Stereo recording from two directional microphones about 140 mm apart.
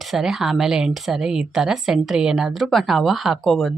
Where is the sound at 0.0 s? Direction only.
Centre (ahead or behind).